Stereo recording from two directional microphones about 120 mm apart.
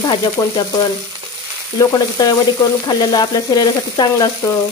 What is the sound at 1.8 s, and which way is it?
Speech, 30° left (ahead or behind).